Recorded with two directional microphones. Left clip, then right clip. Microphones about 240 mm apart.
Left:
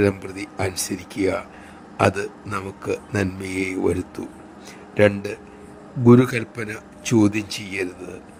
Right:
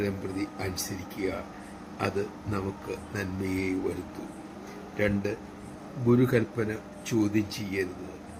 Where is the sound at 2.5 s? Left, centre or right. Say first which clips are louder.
Left 10 dB; left.